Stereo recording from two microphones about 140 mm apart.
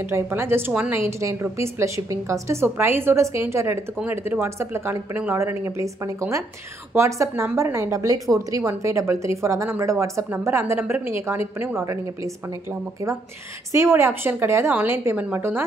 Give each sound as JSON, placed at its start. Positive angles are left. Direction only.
{"t": 0.1, "sound": "a woman's voice", "side_deg": -15}
{"t": 6.9, "sound": "a woman's voice", "side_deg": -20}
{"t": 13.7, "sound": "a woman's voice", "side_deg": -20}